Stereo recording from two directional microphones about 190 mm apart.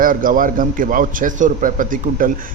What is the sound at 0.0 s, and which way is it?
A man's voice, 45° right (ahead or behind).